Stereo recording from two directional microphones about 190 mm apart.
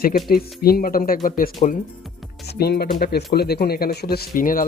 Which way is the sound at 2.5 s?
60° left (ahead or behind).